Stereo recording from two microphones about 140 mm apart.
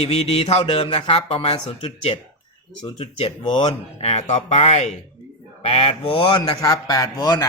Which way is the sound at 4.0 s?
50° left (ahead or behind).